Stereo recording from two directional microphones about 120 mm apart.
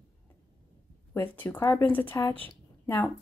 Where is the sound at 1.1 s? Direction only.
15° left (ahead or behind).